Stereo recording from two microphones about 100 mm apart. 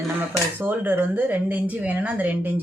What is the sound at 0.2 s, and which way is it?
Speech, 20° right (ahead or behind).